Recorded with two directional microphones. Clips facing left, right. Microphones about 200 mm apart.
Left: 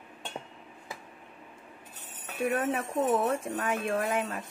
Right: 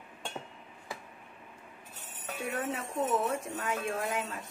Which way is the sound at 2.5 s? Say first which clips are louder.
Left 4 dB; 55° left (ahead or behind).